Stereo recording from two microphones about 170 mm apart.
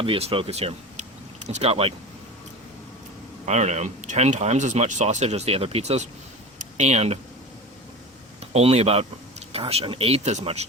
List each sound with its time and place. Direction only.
0.0 s speech: 35° right (ahead or behind)
3.4 s speech: 40° right (ahead or behind)
8.4 s speech: 35° right (ahead or behind)